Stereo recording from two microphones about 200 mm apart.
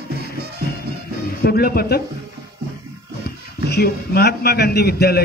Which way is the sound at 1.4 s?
50° left (ahead or behind).